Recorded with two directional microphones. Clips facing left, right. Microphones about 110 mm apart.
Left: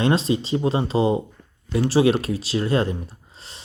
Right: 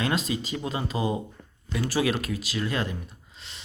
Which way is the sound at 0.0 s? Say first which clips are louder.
Left 7 dB; 30° left (ahead or behind).